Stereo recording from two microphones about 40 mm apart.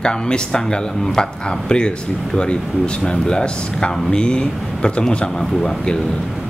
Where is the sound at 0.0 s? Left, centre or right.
Left.